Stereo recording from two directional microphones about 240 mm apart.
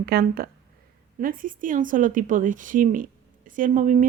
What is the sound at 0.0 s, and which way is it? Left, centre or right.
Speech, right.